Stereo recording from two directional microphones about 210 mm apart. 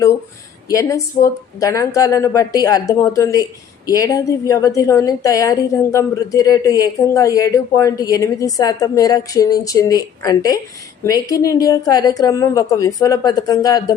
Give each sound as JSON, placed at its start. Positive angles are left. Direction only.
{"t": 0.7, "sound": "a woman's voice", "side_deg": 15}